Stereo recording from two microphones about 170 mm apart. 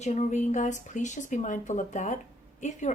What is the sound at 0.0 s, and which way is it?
Speech, 45° left (ahead or behind).